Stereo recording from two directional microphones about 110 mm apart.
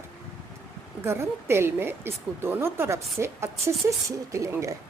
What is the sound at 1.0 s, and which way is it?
Speech, 25° right (ahead or behind).